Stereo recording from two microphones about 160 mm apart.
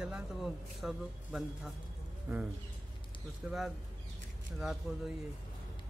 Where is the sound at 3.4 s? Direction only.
10° right (ahead or behind).